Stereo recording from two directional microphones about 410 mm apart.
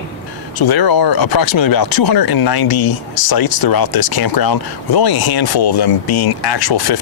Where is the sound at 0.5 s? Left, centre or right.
Left.